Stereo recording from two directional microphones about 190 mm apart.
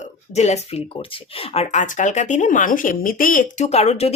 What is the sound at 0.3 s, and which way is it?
Speech, 35° left (ahead or behind).